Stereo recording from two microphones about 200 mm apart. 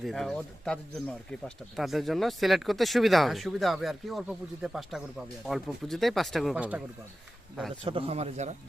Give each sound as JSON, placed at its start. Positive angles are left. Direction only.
{"t": 0.0, "sound": "speech", "side_deg": 0}
{"t": 7.9, "sound": "speech", "side_deg": -30}